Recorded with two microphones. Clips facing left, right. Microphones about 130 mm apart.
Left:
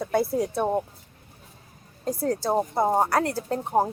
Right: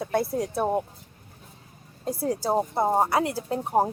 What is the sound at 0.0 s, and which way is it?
Speech, centre (ahead or behind).